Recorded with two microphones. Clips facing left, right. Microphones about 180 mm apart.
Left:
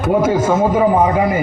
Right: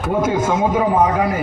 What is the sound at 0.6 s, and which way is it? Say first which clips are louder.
Speech: left 1 dB; 5° left (ahead or behind).